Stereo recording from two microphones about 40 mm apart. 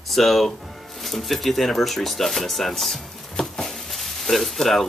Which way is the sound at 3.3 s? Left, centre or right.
Centre.